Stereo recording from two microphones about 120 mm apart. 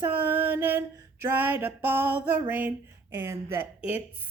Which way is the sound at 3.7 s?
15° right (ahead or behind).